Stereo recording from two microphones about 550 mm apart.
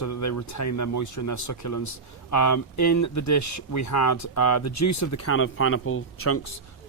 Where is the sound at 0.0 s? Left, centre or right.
Left.